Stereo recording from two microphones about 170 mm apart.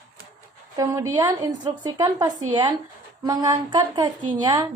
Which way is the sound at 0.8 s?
20° right (ahead or behind).